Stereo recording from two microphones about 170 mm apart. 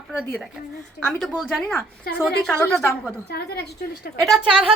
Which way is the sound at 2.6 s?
15° left (ahead or behind).